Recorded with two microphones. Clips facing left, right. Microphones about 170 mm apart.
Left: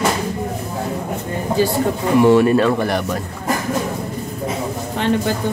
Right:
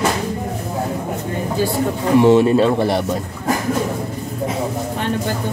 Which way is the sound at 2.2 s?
25° right (ahead or behind).